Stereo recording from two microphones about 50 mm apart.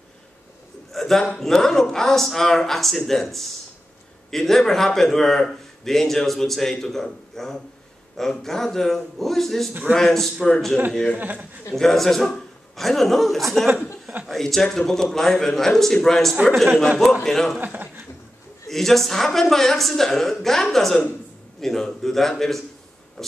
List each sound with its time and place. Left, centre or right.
0.9 s a man's voice: centre
11.1 s a man's voice: right
11.7 s a man's voice: centre
17.6 s speech: right
18.7 s speech: centre